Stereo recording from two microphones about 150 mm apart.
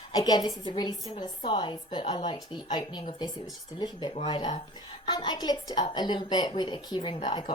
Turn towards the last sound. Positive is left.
turn(degrees=35)  # may be behind; listen again after turning